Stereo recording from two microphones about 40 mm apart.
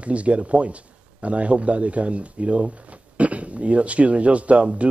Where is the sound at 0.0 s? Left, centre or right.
Right.